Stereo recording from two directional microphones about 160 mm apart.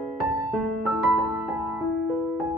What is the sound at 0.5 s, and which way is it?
Music, centre (ahead or behind).